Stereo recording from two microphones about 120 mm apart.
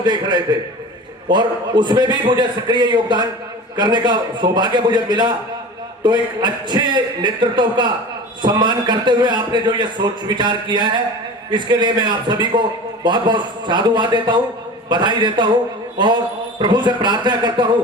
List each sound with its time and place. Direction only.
0.0 s a man's voice: 40° right (ahead or behind)